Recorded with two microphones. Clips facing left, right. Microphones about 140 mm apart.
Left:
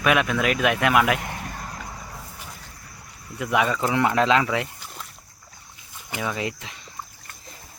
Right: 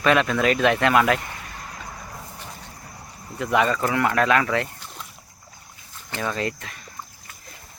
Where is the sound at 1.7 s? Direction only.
5° left (ahead or behind).